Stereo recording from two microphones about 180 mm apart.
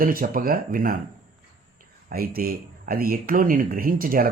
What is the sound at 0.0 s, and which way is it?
Speech, 50° right (ahead or behind).